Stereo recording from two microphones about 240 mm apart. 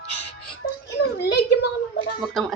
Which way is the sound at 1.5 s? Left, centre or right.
Left.